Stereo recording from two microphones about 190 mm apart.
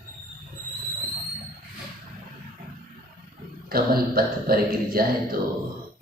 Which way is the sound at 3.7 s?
50° right (ahead or behind).